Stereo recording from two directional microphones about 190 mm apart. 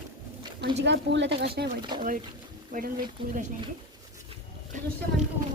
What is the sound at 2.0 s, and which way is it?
Speech, 45° right (ahead or behind).